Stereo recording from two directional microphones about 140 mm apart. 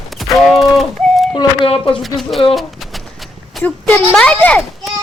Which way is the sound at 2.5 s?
Centre (ahead or behind).